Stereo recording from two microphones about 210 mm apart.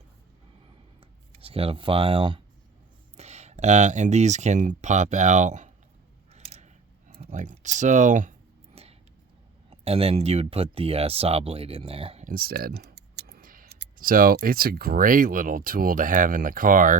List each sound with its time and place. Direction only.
1.4 s speech: 25° right (ahead or behind)
6.3 s scissors: 30° right (ahead or behind)
7.1 s clicking: 30° right (ahead or behind)
9.6 s speech: 30° right (ahead or behind)
12.3 s speech: 45° right (ahead or behind)